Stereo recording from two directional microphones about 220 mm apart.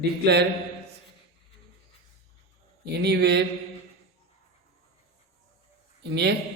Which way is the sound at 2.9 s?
50° right (ahead or behind).